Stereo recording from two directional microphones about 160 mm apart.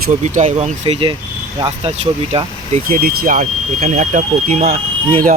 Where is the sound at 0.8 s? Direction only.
35° right (ahead or behind).